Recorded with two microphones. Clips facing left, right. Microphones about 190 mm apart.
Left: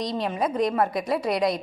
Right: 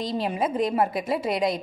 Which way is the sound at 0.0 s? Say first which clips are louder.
Even; 5° right (ahead or behind).